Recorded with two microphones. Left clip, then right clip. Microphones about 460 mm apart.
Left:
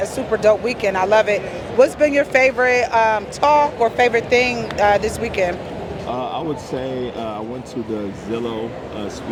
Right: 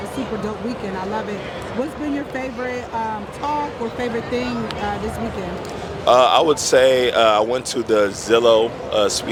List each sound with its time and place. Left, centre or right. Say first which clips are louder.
0.4 s speech: left 11 dB; left
6.1 s speech: right 12 dB; right